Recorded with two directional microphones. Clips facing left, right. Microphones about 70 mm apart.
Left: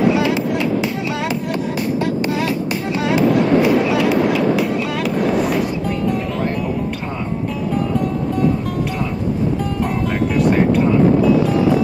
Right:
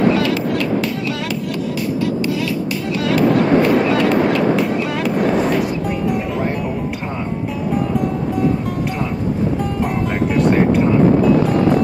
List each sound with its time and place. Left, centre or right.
0.0 s music: centre
3.3 s fireworks: right
3.9 s fireworks: centre
10.3 s vehicle: centre